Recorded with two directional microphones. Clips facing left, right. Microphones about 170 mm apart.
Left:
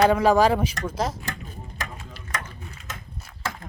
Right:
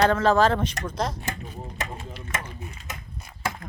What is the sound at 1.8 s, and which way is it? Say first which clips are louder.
Stir: right 2 dB; 25° right (ahead or behind).